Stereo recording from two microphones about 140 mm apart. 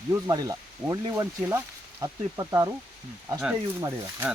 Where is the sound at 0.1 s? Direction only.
25° right (ahead or behind).